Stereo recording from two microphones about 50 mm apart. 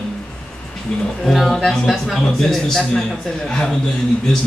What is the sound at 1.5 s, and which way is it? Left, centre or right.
A man's voice, centre.